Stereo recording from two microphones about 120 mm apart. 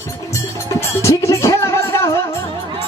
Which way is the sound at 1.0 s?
25° left (ahead or behind).